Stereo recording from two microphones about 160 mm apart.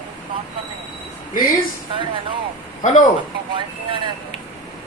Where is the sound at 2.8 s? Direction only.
50° left (ahead or behind).